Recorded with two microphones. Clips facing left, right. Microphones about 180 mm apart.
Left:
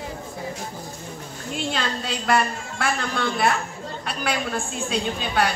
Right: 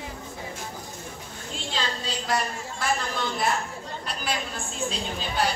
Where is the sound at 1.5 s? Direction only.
65° left (ahead or behind).